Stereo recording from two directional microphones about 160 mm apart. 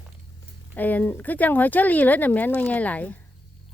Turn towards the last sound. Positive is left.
turn(degrees=10)  # may be behind; listen again after turning